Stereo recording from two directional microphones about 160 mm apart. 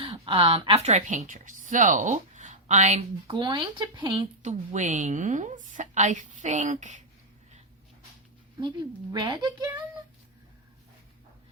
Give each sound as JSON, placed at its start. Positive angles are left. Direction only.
{"t": 0.0, "sound": "a woman's voice", "side_deg": -30}
{"t": 3.2, "sound": "speech", "side_deg": -30}
{"t": 4.4, "sound": "a woman's voice", "side_deg": -50}
{"t": 9.1, "sound": "speech", "side_deg": -25}